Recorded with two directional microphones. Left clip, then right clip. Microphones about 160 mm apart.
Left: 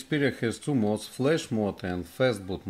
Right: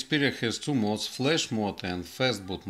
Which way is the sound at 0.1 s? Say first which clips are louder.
Even; 35° left (ahead or behind).